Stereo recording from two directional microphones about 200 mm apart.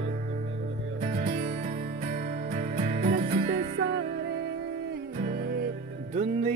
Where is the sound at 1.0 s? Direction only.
35° right (ahead or behind); by 3.6 s 55° right (ahead or behind).